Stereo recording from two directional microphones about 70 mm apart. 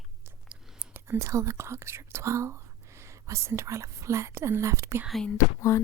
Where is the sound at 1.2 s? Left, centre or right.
Right.